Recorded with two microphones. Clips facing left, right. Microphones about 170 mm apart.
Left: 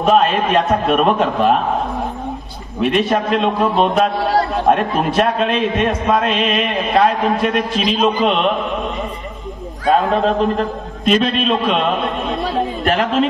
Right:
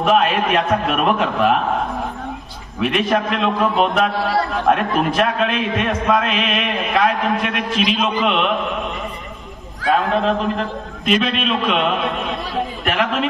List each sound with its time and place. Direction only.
0.0 s a man's voice: 35° left (ahead or behind)
2.8 s a man's voice: 35° left (ahead or behind)
9.8 s a man's voice: 40° left (ahead or behind)
12.8 s a man's voice: 35° left (ahead or behind)